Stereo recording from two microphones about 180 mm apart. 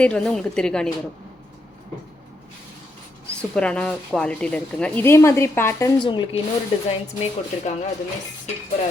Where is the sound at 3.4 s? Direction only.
5° left (ahead or behind).